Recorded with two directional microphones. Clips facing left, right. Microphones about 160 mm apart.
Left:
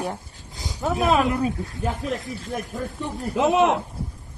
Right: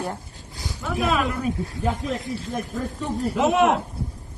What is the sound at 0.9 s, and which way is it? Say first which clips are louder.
Speech: left 3 dB; 30° left (ahead or behind).